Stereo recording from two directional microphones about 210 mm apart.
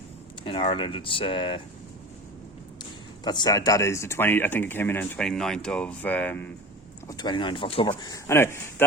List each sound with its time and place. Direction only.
0.4 s speech: 25° left (ahead or behind)
3.2 s speech: 20° left (ahead or behind)
7.1 s speech: 20° left (ahead or behind)